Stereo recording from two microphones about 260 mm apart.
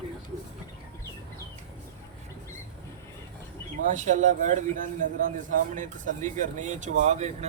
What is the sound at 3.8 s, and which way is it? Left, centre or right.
A man's voice, right.